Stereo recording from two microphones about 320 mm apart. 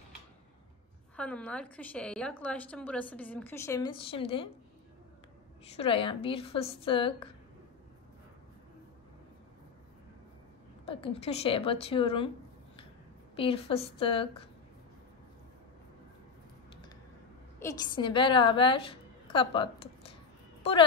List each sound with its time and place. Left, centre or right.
1.1 s a woman's voice: centre
5.8 s a woman's voice: centre
10.9 s a woman's voice: centre
13.4 s a woman's voice: centre
17.6 s a woman's voice: centre